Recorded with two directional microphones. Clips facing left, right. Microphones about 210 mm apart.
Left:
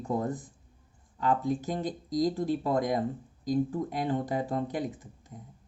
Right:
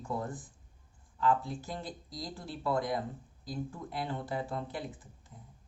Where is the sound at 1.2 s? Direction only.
20° left (ahead or behind).